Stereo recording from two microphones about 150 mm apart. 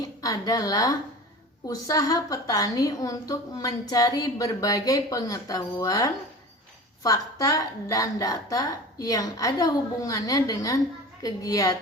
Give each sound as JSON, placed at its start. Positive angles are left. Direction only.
{"t": 0.0, "sound": "a woman's voice", "side_deg": 25}